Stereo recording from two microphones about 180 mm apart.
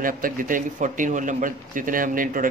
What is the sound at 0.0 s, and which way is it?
Speech, 50° right (ahead or behind).